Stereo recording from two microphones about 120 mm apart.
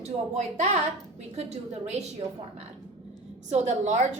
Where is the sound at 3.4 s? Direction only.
70° right (ahead or behind).